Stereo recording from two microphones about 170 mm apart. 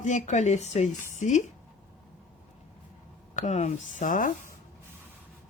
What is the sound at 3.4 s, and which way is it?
Speech, 45° left (ahead or behind).